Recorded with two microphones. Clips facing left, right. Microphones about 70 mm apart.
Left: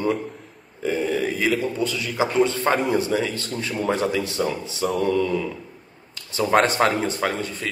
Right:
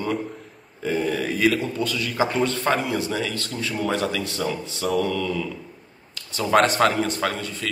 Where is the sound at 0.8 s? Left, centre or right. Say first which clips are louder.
Left 1 dB; centre.